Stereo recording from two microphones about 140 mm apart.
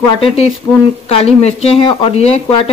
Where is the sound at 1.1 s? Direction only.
45° left (ahead or behind).